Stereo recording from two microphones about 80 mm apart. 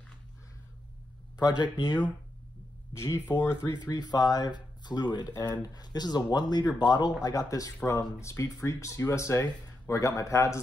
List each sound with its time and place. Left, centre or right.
1.4 s speech: left
2.9 s speech: left
3.6 s speech: left